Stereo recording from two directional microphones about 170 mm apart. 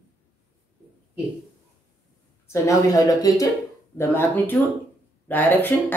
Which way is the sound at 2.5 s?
20° left (ahead or behind).